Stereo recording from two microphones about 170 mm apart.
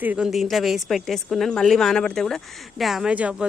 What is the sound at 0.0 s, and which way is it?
Speech, 5° right (ahead or behind).